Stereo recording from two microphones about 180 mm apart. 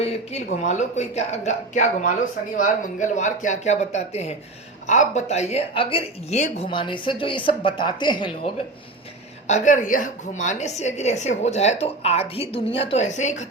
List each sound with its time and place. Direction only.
0.0 s a woman's voice: 35° left (ahead or behind)
6.7 s speech: 25° left (ahead or behind)
9.5 s a woman's voice: 40° left (ahead or behind)